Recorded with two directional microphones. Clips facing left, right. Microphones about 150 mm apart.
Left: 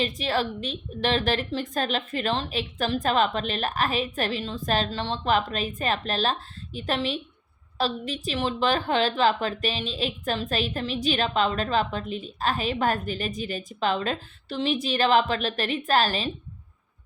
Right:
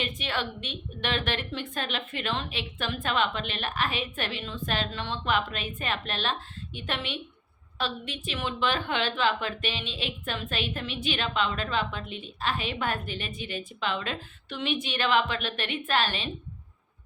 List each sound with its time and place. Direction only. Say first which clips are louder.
0.0 s a woman's voice: left 6 dB; 35° left (ahead or behind)